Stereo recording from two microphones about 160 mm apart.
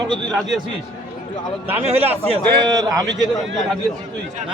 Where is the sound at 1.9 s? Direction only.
40° right (ahead or behind).